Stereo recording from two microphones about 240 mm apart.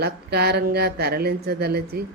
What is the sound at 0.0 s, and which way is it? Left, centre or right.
A woman's voice, right.